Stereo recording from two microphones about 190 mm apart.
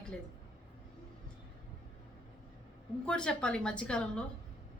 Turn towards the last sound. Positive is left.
turn(degrees=5)  # may be behind; listen again after turning